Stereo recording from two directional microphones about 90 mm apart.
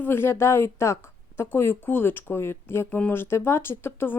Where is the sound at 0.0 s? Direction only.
25° left (ahead or behind).